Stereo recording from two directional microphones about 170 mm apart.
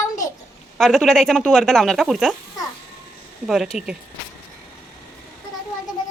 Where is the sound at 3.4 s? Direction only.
Centre (ahead or behind).